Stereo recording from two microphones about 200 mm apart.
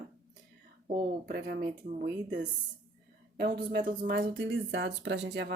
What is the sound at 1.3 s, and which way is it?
Speech, 50° right (ahead or behind).